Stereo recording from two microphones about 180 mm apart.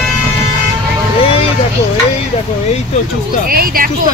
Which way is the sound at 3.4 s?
55° right (ahead or behind).